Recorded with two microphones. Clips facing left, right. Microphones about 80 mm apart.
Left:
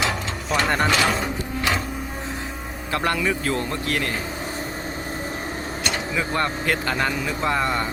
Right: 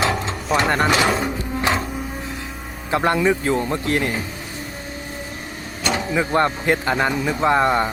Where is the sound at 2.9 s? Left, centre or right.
Right.